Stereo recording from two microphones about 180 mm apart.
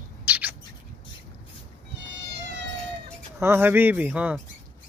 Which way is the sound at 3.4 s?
15° right (ahead or behind).